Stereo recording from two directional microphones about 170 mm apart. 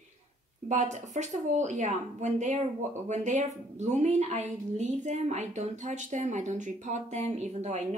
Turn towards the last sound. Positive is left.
turn(degrees=-45)  # may be behind; listen again after turning